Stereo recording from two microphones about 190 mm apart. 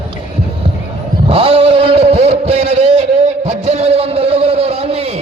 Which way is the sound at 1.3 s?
30° right (ahead or behind).